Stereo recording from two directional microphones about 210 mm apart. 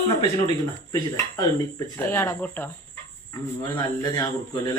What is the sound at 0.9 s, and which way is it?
Speech, 15° left (ahead or behind).